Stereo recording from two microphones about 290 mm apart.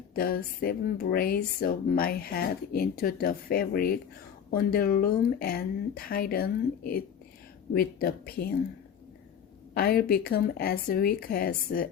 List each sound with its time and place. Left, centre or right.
0.1 s speech: left
9.7 s speech: left